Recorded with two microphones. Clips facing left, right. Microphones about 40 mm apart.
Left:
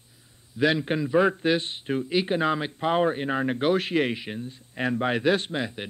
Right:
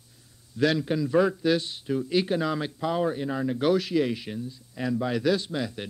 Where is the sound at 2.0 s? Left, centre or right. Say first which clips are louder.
Left 2 dB; left.